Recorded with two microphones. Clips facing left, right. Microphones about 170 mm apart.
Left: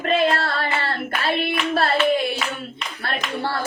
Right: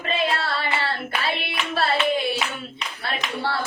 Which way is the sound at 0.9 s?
55° left (ahead or behind).